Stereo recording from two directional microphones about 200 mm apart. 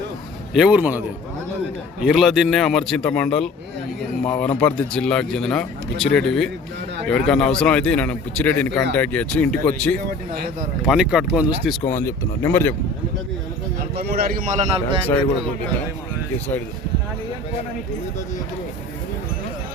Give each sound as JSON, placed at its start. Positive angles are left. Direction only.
{"t": 0.5, "sound": "a man's voice", "side_deg": -5}
{"t": 2.0, "sound": "speech", "side_deg": 0}
{"t": 11.9, "sound": "speech", "side_deg": 10}
{"t": 13.9, "sound": "a man's voice", "side_deg": -50}